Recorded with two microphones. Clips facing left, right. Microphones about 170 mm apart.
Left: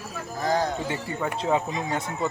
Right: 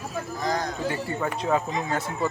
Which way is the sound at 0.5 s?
25° left (ahead or behind).